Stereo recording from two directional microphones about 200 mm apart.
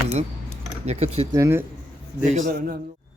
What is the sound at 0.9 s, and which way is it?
Speech, 30° right (ahead or behind).